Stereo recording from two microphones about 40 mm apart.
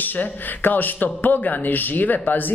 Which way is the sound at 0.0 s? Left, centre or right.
Left.